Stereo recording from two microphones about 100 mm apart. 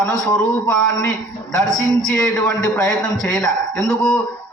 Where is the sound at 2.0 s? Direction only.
5° left (ahead or behind).